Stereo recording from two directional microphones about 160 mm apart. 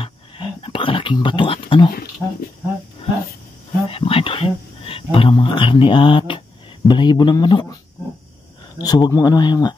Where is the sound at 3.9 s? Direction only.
35° left (ahead or behind).